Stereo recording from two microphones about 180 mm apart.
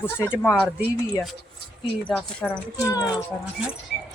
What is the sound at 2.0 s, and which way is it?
Speech, 10° left (ahead or behind).